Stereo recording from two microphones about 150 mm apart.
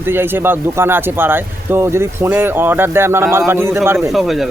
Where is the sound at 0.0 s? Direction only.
15° right (ahead or behind).